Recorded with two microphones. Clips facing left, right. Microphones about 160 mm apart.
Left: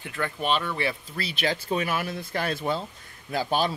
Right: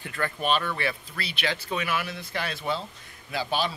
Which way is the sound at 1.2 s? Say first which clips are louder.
Left 3 dB; 40° left (ahead or behind).